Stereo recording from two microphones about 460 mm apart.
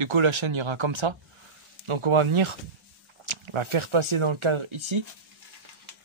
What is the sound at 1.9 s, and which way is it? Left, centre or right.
Speech, right.